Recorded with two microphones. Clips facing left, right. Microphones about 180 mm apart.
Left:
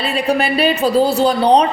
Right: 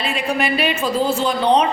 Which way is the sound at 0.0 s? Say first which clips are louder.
Left 4 dB; 35° left (ahead or behind).